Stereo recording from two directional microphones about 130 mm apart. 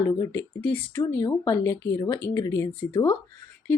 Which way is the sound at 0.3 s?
15° left (ahead or behind).